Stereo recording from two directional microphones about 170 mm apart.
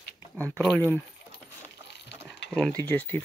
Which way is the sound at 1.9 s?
85° left.